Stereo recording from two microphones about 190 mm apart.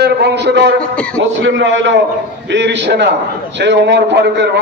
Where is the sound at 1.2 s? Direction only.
80° right.